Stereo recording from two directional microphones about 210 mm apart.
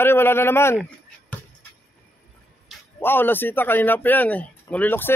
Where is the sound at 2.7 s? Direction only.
10° left (ahead or behind).